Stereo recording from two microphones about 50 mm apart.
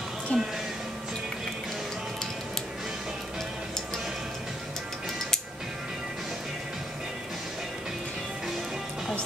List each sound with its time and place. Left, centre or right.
0.3 s music: centre